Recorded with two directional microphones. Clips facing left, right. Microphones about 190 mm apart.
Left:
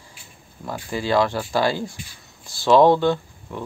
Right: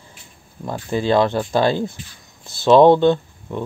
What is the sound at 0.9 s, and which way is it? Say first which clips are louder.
Speech: right 4 dB; 20° right (ahead or behind).